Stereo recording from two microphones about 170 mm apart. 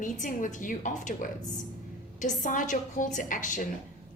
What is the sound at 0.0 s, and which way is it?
A woman's voice, 50° left (ahead or behind).